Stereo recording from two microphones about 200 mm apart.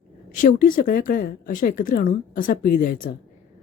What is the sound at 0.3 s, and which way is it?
Speech, 40° left (ahead or behind).